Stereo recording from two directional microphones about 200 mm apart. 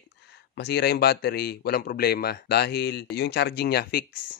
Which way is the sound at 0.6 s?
55° left (ahead or behind).